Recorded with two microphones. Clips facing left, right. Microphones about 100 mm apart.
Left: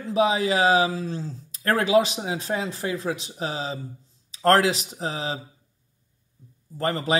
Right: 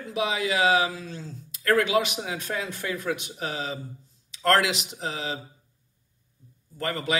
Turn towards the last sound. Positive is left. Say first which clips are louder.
# left 4 dB
turn(degrees=35)  # may be behind; listen again after turning